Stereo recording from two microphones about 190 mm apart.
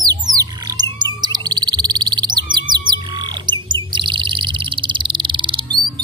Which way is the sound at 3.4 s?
25° right (ahead or behind).